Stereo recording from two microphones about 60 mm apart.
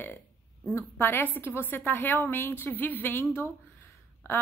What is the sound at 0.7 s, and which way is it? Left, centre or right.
A woman's voice, left.